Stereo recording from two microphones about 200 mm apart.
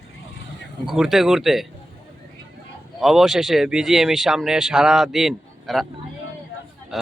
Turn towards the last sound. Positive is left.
turn(degrees=0)  # may be behind; listen again after turning